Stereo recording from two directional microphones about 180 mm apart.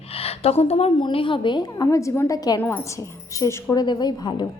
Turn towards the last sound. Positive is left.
turn(degrees=25)  # may be behind; listen again after turning